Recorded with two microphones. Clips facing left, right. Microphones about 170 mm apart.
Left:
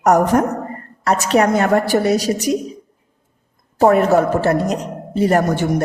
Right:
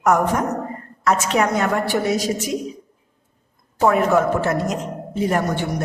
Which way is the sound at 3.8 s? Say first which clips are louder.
Left 4 dB; 40° left (ahead or behind).